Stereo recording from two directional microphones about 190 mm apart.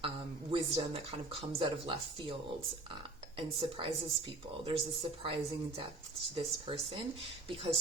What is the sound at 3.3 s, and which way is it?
Speech, 30° right (ahead or behind).